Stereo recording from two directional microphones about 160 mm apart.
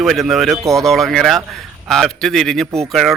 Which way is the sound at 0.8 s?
Centre (ahead or behind).